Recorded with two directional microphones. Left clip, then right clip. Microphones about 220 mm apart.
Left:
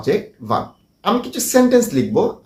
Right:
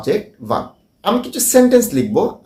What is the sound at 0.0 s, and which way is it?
A woman's voice, 15° right (ahead or behind).